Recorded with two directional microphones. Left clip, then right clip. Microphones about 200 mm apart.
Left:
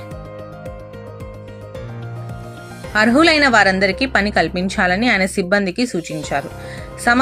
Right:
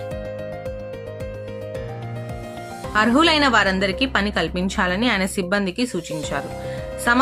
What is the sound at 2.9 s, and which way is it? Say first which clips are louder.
A woman's voice: left 4 dB; 15° left (ahead or behind).